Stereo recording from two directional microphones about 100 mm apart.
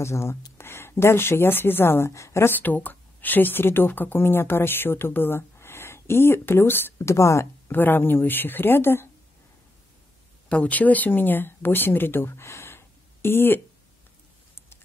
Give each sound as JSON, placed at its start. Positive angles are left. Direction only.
{"t": 0.0, "sound": "a woman's voice", "side_deg": 25}
{"t": 10.5, "sound": "speech", "side_deg": 15}